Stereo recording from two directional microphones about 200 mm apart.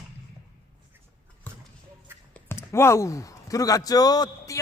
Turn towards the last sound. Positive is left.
turn(degrees=15)  # may be behind; listen again after turning